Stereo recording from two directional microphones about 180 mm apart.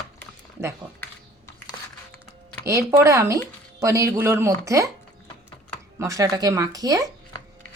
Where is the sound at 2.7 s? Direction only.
15° right (ahead or behind).